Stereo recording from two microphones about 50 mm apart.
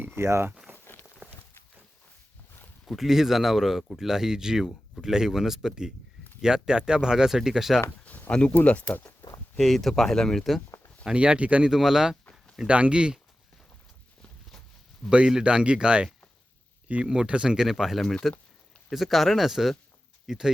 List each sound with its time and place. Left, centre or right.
0.2 s speech: right
1.2 s a sound: right
2.8 s speech: centre
8.3 s speech: left
9.6 s speech: centre
11.1 s speech: right
11.6 s speech: centre
12.6 s speech: right
15.3 s speech: centre
18.0 s speech: centre
18.9 s speech: centre